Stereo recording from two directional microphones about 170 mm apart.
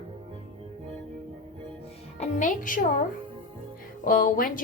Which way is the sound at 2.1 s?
45° left (ahead or behind).